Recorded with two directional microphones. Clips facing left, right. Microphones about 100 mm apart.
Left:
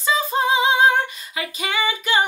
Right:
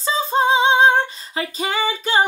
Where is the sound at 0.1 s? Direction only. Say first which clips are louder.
Right 2 dB; 30° right (ahead or behind).